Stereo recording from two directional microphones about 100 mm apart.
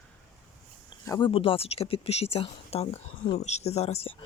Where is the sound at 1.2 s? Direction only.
65° left (ahead or behind).